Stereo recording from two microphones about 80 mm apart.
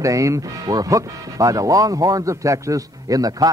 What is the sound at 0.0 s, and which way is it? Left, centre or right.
Speech, right.